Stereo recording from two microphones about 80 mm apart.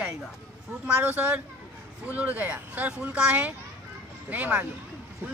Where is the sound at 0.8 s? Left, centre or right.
Centre.